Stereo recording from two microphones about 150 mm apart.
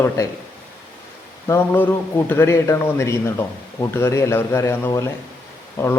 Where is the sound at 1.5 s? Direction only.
15° left (ahead or behind).